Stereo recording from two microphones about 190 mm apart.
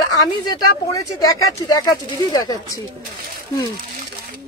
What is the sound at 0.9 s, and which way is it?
Speech, 20° left (ahead or behind).